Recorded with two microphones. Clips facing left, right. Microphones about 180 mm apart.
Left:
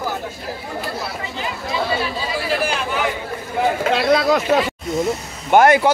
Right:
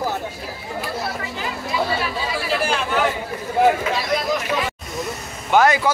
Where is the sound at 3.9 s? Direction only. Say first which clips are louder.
Left 6 dB; 70° left (ahead or behind).